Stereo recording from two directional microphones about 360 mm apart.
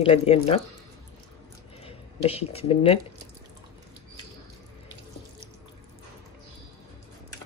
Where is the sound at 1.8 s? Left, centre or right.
Centre.